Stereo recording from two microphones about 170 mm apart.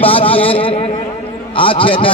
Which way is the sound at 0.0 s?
35° left (ahead or behind).